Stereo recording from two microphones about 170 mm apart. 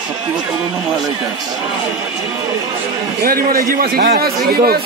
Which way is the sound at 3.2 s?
60° right (ahead or behind).